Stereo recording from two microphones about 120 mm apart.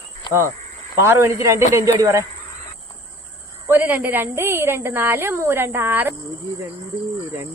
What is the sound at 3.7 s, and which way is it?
Speech, 15° right (ahead or behind).